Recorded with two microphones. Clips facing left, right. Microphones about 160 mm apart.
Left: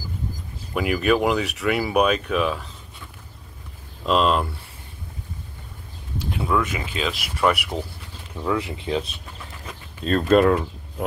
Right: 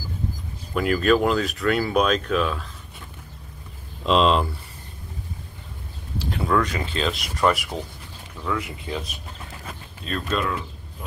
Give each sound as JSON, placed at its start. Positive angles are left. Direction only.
{"t": 0.7, "sound": "speech", "side_deg": 10}
{"t": 4.0, "sound": "speech", "side_deg": 5}
{"t": 6.3, "sound": "speech", "side_deg": 5}
{"t": 8.5, "sound": "speech", "side_deg": 25}
{"t": 10.2, "sound": "speech", "side_deg": 50}